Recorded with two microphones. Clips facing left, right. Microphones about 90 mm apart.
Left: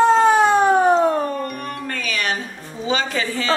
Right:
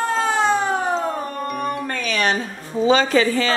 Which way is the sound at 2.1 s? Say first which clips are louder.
Right 4 dB; 30° right (ahead or behind).